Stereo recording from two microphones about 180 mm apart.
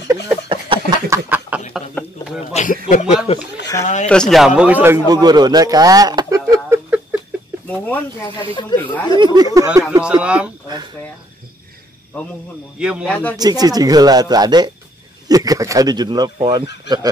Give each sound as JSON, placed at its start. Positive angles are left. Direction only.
{"t": 0.5, "sound": "a sound", "side_deg": -25}
{"t": 1.1, "sound": "snicker", "side_deg": -10}
{"t": 2.0, "sound": "a sound", "side_deg": 10}
{"t": 2.5, "sound": "a sound", "side_deg": 45}
{"t": 2.9, "sound": "speech", "side_deg": 40}
{"t": 4.1, "sound": "a man's voice", "side_deg": 0}
{"t": 7.6, "sound": "speech", "side_deg": 10}
{"t": 8.7, "sound": "speech", "side_deg": 25}
{"t": 9.1, "sound": "speech", "side_deg": -25}
{"t": 9.8, "sound": "speech", "side_deg": -5}
{"t": 12.7, "sound": "speech", "side_deg": -5}
{"t": 13.1, "sound": "speech", "side_deg": 10}
{"t": 13.4, "sound": "speech", "side_deg": -20}